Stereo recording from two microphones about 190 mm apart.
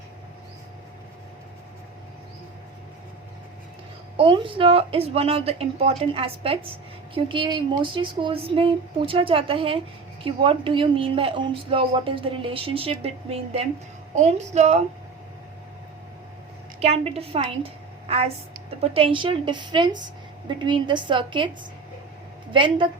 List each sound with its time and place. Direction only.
4.2 s a woman's voice: 30° right (ahead or behind)
16.8 s a woman's voice: 35° right (ahead or behind)
22.5 s a woman's voice: 25° right (ahead or behind)